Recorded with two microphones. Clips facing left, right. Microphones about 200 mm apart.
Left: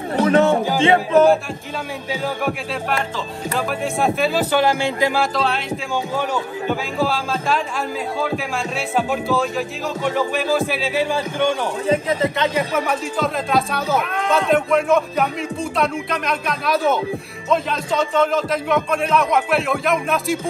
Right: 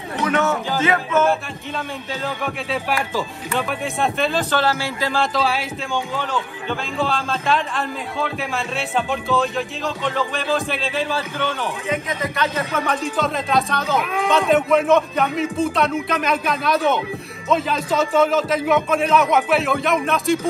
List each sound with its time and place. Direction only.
0.2 s music: 30° left (ahead or behind)
2.0 s speech: 10° left (ahead or behind)
3.5 s speech: centre (ahead or behind)
5.2 s a man's voice: centre (ahead or behind)
6.1 s a man's voice: 10° left (ahead or behind)
11.9 s music: 30° left (ahead or behind)
12.4 s a man's voice: 10° left (ahead or behind)